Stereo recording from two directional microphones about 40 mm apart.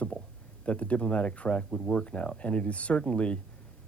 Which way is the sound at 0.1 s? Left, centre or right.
Left.